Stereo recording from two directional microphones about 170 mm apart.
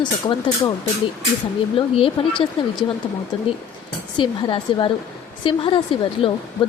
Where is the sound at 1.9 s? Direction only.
30° left (ahead or behind).